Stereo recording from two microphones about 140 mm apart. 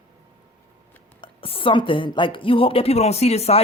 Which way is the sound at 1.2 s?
40° left (ahead or behind).